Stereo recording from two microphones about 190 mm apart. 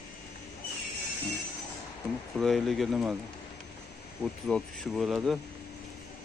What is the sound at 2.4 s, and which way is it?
Speech, centre (ahead or behind).